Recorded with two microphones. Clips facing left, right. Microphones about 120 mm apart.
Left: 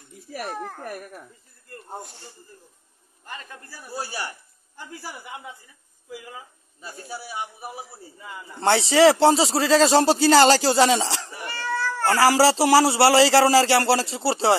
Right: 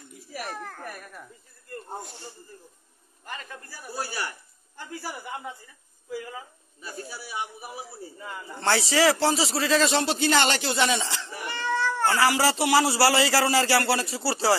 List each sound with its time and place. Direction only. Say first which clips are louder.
0.5 s a sound: left 6 dB; 15° left (ahead or behind)
3.3 s speech: even; 25° left (ahead or behind)
8.5 s speech: left 5 dB; 25° left (ahead or behind)
11.4 s cat: right 1 dB; 20° right (ahead or behind)
12.1 s speech: left 7 dB; 35° left (ahead or behind)